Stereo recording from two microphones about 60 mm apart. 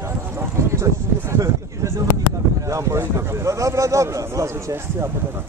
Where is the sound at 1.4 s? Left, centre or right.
Right.